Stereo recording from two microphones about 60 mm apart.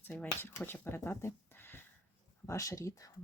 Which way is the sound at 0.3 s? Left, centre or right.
Left.